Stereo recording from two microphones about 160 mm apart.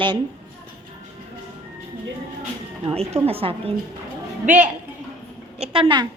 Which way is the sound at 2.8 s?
40° right (ahead or behind).